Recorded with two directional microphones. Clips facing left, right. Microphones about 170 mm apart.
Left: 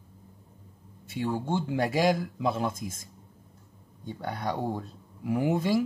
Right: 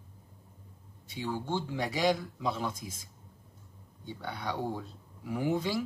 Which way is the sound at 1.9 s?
50° left (ahead or behind).